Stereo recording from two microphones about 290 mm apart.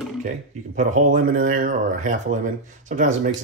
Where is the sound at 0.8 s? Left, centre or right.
Right.